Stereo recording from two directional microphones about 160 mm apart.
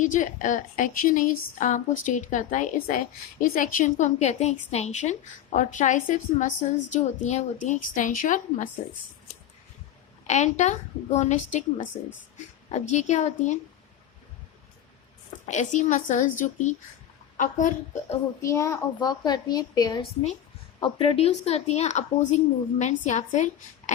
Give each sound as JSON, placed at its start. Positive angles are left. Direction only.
{"t": 0.0, "sound": "a woman's voice", "side_deg": 55}
{"t": 10.2, "sound": "a woman's voice", "side_deg": 45}
{"t": 15.4, "sound": "a woman's voice", "side_deg": 50}
{"t": 18.4, "sound": "a woman's voice", "side_deg": 20}